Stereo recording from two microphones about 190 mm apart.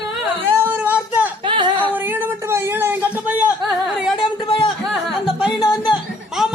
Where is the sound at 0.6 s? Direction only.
10° right (ahead or behind).